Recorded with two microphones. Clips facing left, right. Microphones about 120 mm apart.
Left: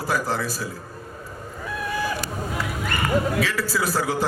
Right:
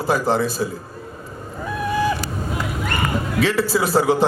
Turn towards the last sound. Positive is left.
turn(degrees=-25)  # may be behind; listen again after turning